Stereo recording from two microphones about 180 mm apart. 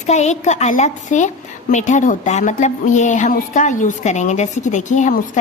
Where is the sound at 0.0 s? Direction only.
40° left (ahead or behind).